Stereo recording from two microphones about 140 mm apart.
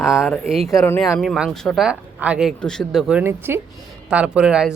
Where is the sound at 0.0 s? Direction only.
5° right (ahead or behind).